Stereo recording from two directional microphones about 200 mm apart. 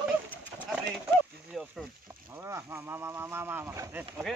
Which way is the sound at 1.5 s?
Centre (ahead or behind).